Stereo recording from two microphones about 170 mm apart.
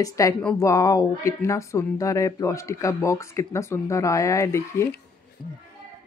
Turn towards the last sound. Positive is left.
turn(degrees=15)  # may be behind; listen again after turning